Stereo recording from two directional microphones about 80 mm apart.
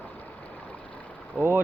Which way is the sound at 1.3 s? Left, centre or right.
Centre.